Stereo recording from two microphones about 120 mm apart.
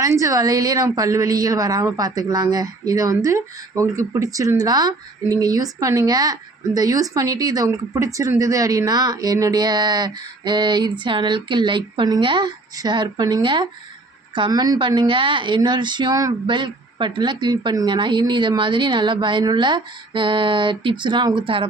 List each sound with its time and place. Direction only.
0.0 s a woman's voice: 25° right (ahead or behind); by 21.7 s 45° right (ahead or behind)